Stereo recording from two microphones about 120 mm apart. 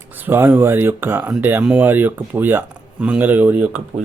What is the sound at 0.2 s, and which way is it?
Speech, 15° right (ahead or behind).